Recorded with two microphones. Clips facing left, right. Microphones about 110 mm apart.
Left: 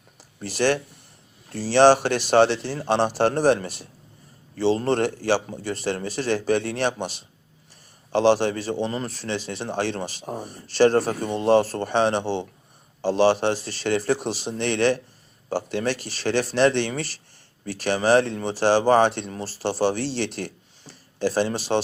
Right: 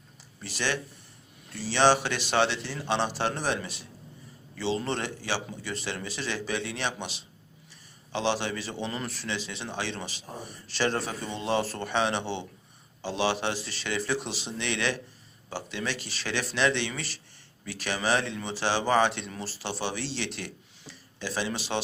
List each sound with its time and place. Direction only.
0.3 s speech: 45° left (ahead or behind)